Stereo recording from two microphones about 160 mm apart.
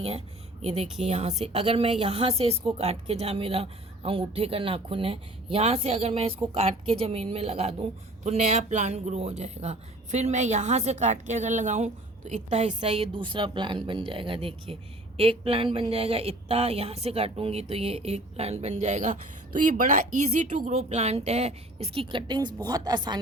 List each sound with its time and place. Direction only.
0.6 s a woman's voice: 40° right (ahead or behind); by 23.1 s 25° right (ahead or behind)